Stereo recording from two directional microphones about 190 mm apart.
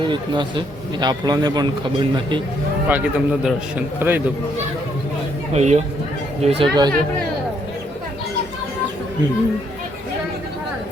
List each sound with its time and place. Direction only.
0.1 s speech: 25° right (ahead or behind)
2.9 s a man's voice: 5° right (ahead or behind)
5.5 s speech: 35° right (ahead or behind)